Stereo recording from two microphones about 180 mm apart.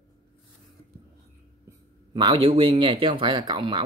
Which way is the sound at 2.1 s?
30° right (ahead or behind).